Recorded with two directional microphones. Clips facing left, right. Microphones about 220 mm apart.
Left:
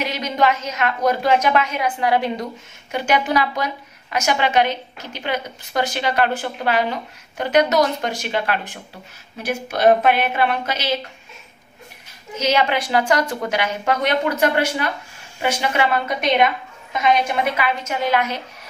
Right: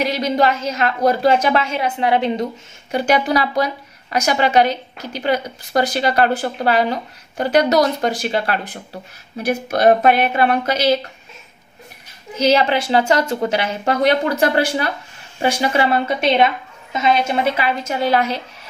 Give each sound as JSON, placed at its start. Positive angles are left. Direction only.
{"t": 0.0, "sound": "speech", "side_deg": -35}
{"t": 2.9, "sound": "speech", "side_deg": -35}
{"t": 12.4, "sound": "speech", "side_deg": -35}